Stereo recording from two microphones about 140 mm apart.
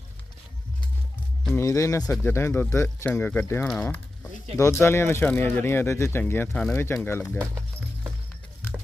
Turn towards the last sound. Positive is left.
turn(degrees=15)  # may be behind; listen again after turning